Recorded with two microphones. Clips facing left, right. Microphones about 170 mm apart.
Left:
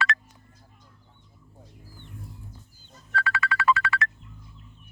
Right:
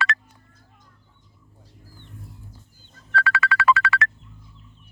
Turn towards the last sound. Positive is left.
turn(degrees=-90)